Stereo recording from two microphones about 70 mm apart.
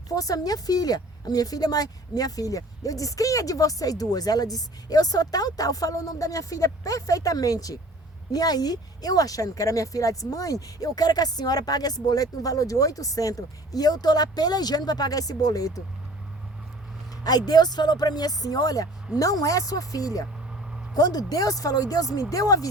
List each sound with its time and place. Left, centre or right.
0.1 s a woman's voice: left
17.2 s a woman's voice: left